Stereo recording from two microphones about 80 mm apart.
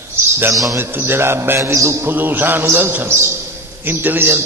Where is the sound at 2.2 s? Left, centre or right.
Right.